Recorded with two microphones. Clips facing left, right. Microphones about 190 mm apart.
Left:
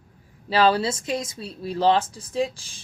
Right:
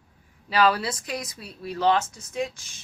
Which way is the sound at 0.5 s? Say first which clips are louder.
Left 3 dB; 30° left (ahead or behind).